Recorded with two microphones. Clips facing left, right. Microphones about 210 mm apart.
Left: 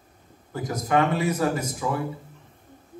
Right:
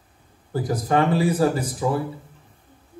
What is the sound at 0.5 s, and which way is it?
Speech, 30° right (ahead or behind).